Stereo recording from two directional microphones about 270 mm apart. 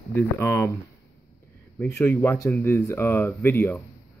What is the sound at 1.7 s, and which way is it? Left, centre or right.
Speech, centre.